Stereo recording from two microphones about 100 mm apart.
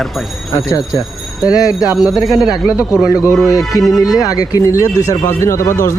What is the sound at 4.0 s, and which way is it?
Speech, 40° left (ahead or behind).